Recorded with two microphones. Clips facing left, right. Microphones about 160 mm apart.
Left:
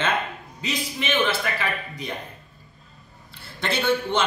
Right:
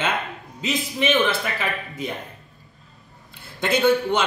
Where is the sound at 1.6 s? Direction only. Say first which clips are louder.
Right 2 dB; 20° right (ahead or behind).